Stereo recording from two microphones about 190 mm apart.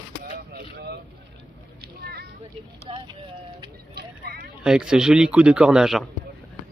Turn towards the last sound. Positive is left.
turn(degrees=0)  # may be behind; listen again after turning